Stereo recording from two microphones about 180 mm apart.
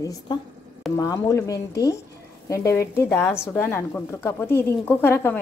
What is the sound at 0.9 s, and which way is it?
Speech, 20° left (ahead or behind).